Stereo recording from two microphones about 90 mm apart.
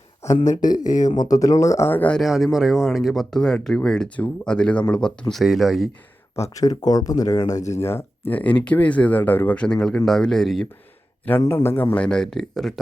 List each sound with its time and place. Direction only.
0.5 s speech: 45° left (ahead or behind)
1.9 s speech: 20° left (ahead or behind)
2.1 s speech: centre (ahead or behind)
5.3 s speech: centre (ahead or behind)
6.3 s speech: 35° left (ahead or behind); by 9.6 s 20° left (ahead or behind)
9.6 s speech: 10° left (ahead or behind)
11.3 s speech: 25° left (ahead or behind)
11.9 s speech: 10° left (ahead or behind)